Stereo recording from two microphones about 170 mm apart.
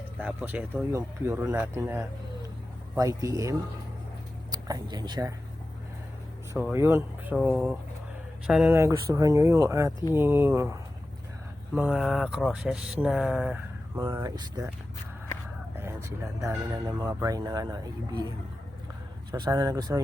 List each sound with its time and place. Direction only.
0.2 s speech: 10° right (ahead or behind)
4.5 s speech: 25° right (ahead or behind)
6.5 s speech: 15° right (ahead or behind)
15.8 s vehicle: 15° right (ahead or behind)
16.5 s speech: 15° right (ahead or behind)
19.3 s speech: 20° right (ahead or behind)